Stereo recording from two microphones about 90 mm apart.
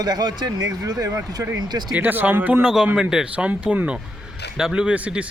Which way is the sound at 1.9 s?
20° right (ahead or behind).